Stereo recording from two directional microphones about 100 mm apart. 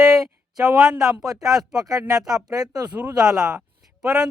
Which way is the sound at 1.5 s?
35° right (ahead or behind).